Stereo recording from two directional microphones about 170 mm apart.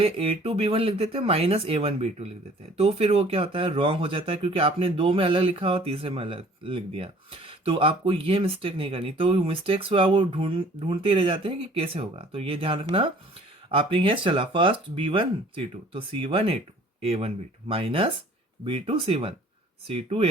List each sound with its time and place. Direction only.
0.0 s speech: 35° right (ahead or behind)